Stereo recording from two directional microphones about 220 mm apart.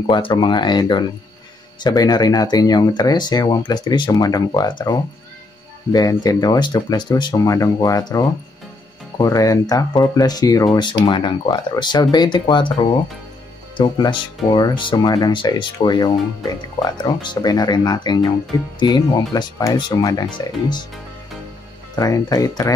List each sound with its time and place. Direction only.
0.0 s speech: 20° left (ahead or behind)
21.9 s speech: 15° left (ahead or behind)